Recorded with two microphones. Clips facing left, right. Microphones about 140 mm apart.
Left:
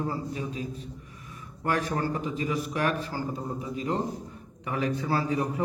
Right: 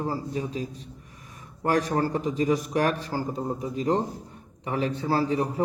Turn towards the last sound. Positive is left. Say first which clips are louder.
# right 3 dB
turn(degrees=-30)  # may be behind; listen again after turning